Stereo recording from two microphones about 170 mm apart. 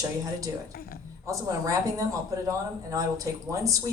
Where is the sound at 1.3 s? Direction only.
20° right (ahead or behind).